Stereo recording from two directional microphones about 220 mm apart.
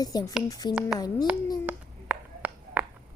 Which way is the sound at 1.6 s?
5° right (ahead or behind).